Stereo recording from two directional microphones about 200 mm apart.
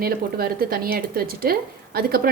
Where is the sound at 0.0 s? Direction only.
50° right (ahead or behind).